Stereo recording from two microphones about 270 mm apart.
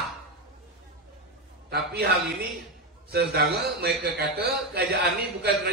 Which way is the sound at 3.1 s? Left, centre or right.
Right.